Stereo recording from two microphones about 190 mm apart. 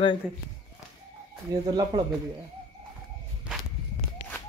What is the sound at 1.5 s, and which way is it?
Speech, 20° right (ahead or behind).